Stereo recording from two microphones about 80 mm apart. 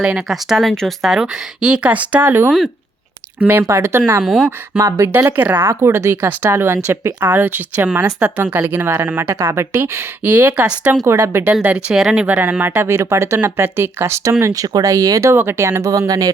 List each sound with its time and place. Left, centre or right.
0.0 s speech: centre
0.3 s speech: centre; by 2.5 s right
3.7 s speech: right
4.2 s speech: centre
4.8 s speech: right
5.4 s speech: right
10.2 s speech: right
11.0 s speech: right
11.6 s speech: centre
12.4 s speech: right
15.4 s speech: right